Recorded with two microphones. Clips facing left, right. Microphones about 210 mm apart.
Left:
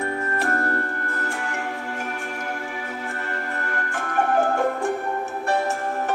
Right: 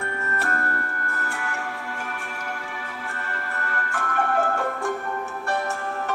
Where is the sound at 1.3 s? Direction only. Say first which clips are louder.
Left 3 dB; 30° left (ahead or behind).